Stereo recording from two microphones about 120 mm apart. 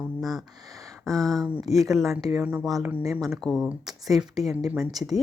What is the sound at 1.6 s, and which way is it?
Speech, 30° right (ahead or behind).